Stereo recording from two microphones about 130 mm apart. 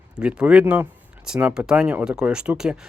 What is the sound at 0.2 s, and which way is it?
Speech, 10° right (ahead or behind).